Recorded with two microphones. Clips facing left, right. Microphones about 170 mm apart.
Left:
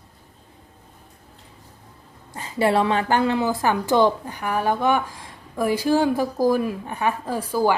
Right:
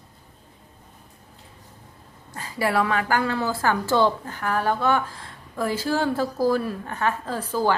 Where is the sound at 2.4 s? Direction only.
20° left (ahead or behind).